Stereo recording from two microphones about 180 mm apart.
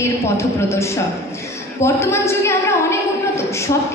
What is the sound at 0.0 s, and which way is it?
A woman's voice, 15° left (ahead or behind).